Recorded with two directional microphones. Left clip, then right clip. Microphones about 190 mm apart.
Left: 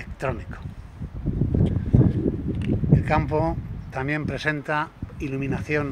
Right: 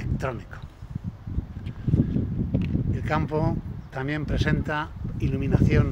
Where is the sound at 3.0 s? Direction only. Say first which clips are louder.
Left 2 dB; 15° left (ahead or behind).